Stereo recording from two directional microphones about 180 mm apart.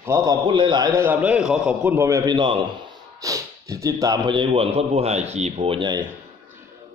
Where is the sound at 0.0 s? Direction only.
20° right (ahead or behind).